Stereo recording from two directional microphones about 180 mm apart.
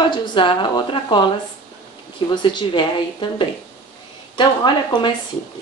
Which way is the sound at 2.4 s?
25° left (ahead or behind).